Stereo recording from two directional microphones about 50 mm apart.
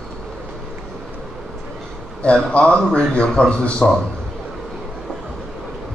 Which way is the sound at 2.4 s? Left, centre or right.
Centre.